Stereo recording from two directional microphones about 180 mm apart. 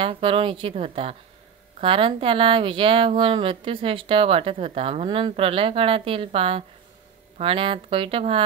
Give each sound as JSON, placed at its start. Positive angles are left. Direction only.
{"t": 0.0, "sound": "speech", "side_deg": -30}